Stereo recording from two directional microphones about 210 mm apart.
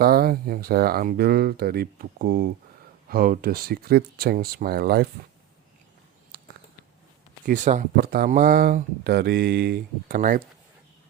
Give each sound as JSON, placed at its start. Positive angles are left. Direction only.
{"t": 0.0, "sound": "speech", "side_deg": -45}
{"t": 6.3, "sound": "biting", "side_deg": -50}
{"t": 7.4, "sound": "speech", "side_deg": -35}